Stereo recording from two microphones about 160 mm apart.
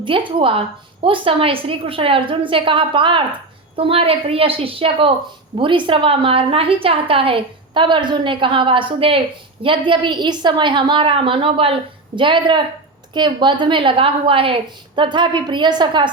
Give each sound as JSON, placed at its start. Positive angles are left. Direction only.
{"t": 0.0, "sound": "a woman's voice", "side_deg": -30}